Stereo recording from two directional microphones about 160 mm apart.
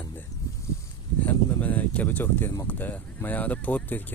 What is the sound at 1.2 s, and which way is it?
Speech, 10° left (ahead or behind).